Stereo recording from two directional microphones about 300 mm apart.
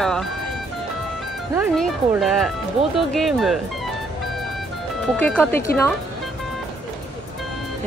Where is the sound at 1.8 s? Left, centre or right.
Centre.